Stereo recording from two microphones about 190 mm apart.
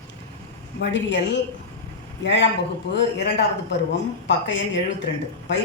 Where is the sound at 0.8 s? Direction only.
70° left (ahead or behind).